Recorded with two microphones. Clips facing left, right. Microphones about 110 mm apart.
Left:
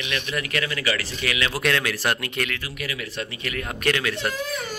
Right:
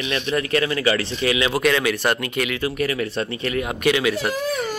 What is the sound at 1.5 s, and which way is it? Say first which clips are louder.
Speech: right 5 dB; 5° right (ahead or behind).